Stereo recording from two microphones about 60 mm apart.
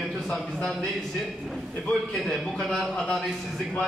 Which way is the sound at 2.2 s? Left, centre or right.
Centre.